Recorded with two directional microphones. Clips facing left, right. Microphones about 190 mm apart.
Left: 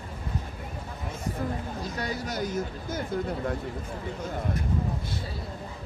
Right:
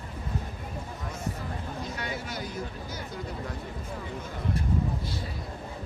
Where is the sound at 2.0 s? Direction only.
40° left (ahead or behind).